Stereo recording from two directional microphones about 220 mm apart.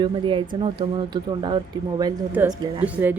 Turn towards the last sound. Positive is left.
turn(degrees=-10)  # may be behind; listen again after turning